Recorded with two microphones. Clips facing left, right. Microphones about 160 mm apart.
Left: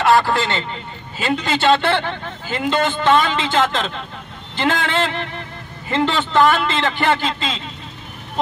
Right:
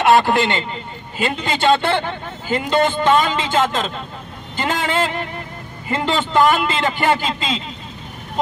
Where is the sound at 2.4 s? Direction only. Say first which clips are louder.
Right 2 dB; 10° right (ahead or behind).